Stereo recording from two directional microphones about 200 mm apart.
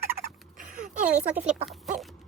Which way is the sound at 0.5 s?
40° right (ahead or behind).